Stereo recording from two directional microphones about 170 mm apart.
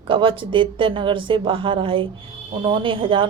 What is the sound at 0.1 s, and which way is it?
Speech, 30° right (ahead or behind).